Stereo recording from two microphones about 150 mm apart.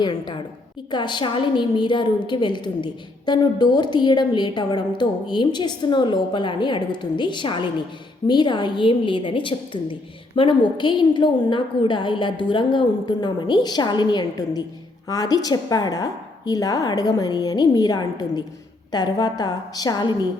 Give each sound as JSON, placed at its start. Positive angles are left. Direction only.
{"t": 0.0, "sound": "a woman's voice", "side_deg": 30}